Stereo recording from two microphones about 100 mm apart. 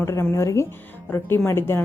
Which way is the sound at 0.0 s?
25° left (ahead or behind).